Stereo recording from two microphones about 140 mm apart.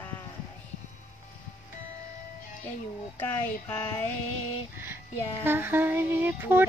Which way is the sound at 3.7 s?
15° left (ahead or behind).